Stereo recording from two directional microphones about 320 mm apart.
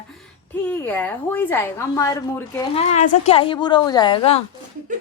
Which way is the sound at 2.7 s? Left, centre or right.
Left.